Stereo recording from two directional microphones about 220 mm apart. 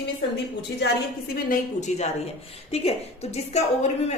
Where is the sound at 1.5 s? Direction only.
30° left (ahead or behind).